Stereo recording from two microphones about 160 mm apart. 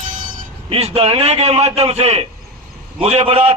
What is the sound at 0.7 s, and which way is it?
Speech, 40° right (ahead or behind).